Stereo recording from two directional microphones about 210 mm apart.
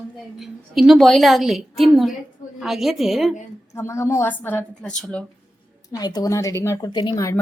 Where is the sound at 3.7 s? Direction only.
15° left (ahead or behind).